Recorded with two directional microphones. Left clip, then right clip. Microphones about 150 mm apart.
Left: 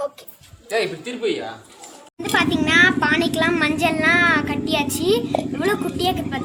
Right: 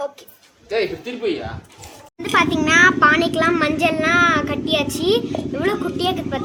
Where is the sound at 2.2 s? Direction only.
45° right (ahead or behind).